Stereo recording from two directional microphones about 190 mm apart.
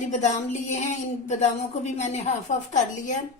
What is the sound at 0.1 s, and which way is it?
Speech, 35° left (ahead or behind).